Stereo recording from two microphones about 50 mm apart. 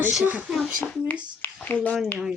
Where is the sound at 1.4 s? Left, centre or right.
Left.